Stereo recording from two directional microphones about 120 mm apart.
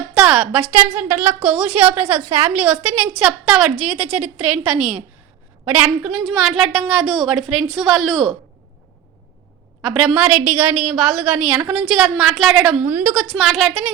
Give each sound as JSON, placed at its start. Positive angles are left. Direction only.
{"t": 0.1, "sound": "a woman's voice", "side_deg": -10}
{"t": 2.3, "sound": "a woman's voice", "side_deg": -65}
{"t": 2.6, "sound": "a woman's voice", "side_deg": -15}
{"t": 9.8, "sound": "a woman's voice", "side_deg": -5}
{"t": 12.8, "sound": "a woman's voice", "side_deg": -15}
{"t": 13.2, "sound": "a woman's voice", "side_deg": 0}